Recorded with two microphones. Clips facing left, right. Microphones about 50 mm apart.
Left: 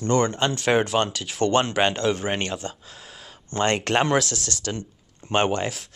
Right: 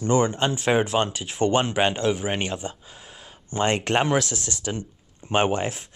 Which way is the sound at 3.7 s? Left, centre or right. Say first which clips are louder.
Left 1 dB; centre.